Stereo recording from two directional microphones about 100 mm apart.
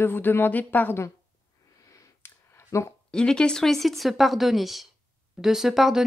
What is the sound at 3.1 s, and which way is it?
Speech, 10° left (ahead or behind).